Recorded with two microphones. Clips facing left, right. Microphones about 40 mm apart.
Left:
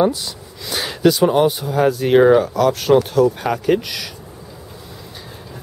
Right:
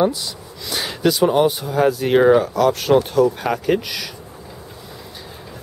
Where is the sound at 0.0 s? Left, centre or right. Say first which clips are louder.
Left 1 dB; centre.